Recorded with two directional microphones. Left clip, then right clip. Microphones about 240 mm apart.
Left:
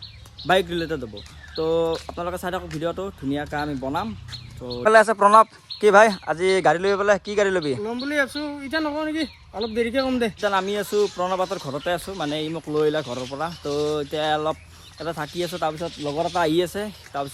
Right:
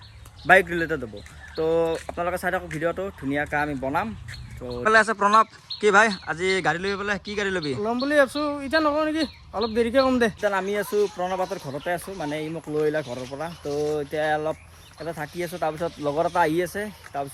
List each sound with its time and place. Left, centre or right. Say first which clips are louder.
0.4 s speech: right 3 dB; centre
4.8 s speech: left 4 dB; centre
7.8 s a man's voice: right 3 dB; right
10.4 s speech: left 2 dB; centre
15.8 s speech: right 1 dB; centre